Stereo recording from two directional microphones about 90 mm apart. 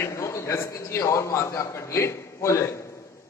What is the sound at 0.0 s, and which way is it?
A man's voice, 35° left (ahead or behind).